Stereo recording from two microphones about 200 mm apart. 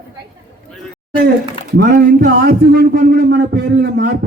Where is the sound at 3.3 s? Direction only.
60° right (ahead or behind).